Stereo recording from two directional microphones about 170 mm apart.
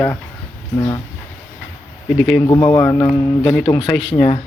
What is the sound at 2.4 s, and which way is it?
Speech, 20° left (ahead or behind).